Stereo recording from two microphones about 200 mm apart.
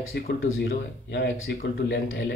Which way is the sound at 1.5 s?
50° left (ahead or behind).